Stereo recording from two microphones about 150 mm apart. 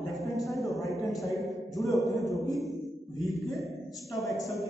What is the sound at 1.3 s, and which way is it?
Speech, 20° left (ahead or behind).